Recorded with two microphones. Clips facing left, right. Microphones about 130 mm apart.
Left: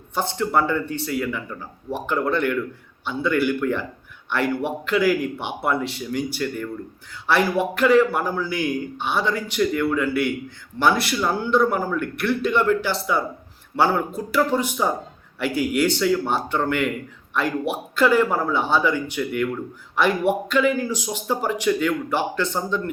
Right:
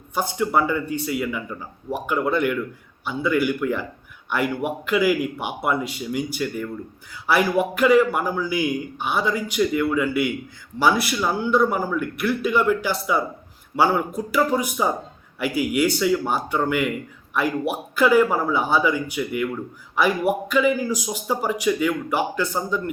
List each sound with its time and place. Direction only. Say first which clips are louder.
0.1 s speech: even; 10° right (ahead or behind)